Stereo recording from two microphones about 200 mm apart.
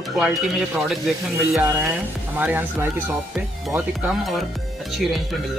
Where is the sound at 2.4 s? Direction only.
10° right (ahead or behind).